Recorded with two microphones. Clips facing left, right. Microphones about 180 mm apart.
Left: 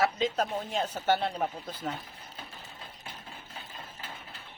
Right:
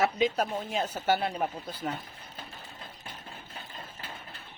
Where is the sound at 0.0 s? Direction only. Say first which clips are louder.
Right 1 dB; 10° right (ahead or behind).